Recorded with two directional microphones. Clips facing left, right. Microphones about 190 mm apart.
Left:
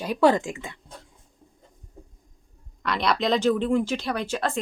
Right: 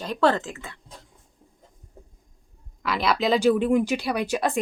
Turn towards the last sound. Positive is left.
turn(degrees=-15)  # may be behind; listen again after turning